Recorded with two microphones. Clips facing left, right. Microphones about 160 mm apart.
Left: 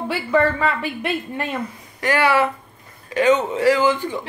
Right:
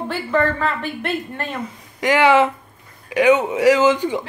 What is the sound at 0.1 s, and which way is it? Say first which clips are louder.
A woman's voice: left 1 dB; 10° left (ahead or behind).